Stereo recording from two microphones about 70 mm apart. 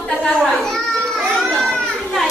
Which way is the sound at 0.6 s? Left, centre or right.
Centre.